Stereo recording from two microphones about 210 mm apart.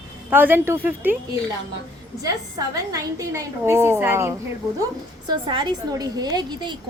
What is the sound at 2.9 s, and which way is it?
A woman's voice, 15° right (ahead or behind).